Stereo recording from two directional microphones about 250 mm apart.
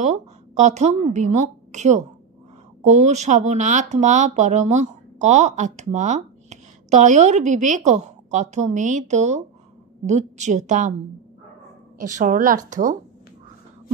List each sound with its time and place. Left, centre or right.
0.0 s speech: right
12.0 s speech: right